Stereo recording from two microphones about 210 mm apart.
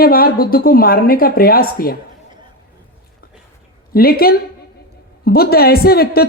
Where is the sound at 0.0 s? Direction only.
45° left (ahead or behind).